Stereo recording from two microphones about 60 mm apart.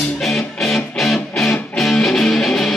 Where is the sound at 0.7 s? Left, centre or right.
Centre.